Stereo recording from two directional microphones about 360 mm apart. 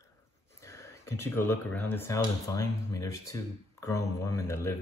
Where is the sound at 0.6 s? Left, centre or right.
Centre.